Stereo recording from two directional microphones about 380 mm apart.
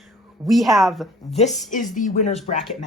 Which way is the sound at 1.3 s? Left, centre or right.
Centre.